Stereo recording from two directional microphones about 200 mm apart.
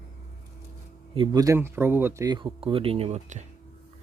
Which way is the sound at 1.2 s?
20° right (ahead or behind).